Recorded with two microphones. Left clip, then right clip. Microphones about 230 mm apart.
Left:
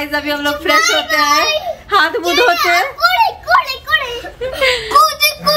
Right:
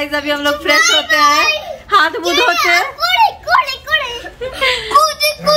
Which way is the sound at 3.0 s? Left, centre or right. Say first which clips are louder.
Even; centre.